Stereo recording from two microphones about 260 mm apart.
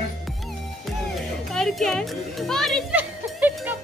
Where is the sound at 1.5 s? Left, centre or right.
Centre.